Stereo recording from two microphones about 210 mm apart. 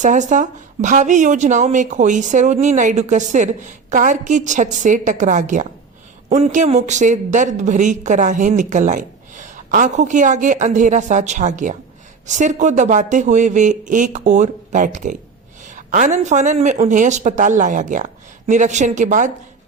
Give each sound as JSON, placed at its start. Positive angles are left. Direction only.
{"t": 0.0, "sound": "speech", "side_deg": -35}